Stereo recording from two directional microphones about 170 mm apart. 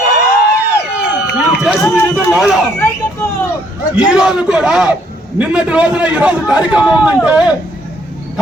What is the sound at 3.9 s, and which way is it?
A man's voice, 5° right (ahead or behind).